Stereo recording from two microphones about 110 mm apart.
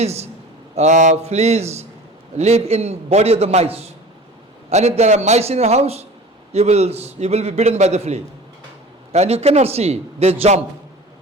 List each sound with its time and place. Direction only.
0.0 s a man's voice: 75° right (ahead or behind)
0.8 s a man's voice: 90° right; by 3.8 s 70° right (ahead or behind)
4.7 s a man's voice: 85° right